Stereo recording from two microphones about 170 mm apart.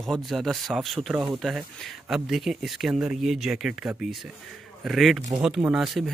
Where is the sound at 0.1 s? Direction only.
Centre (ahead or behind).